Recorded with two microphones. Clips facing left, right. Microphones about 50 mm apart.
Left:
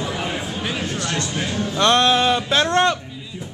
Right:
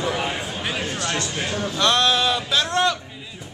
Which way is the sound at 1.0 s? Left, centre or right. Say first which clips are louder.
Left 1 dB; right.